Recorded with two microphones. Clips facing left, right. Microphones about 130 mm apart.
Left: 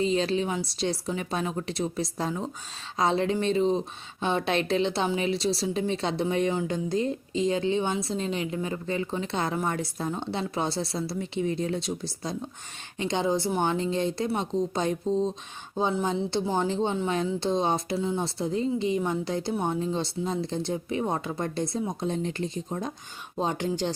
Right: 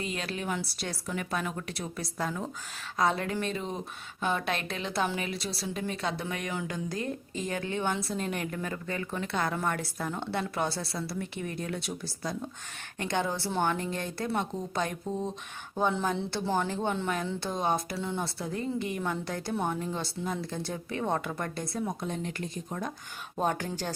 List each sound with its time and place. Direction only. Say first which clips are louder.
0.0 s a woman's voice: left 9 dB; 30° left (ahead or behind)
8.1 s a woman's voice: left 3 dB; 55° right (ahead or behind)
8.4 s a woman's voice: left 4 dB; 20° left (ahead or behind)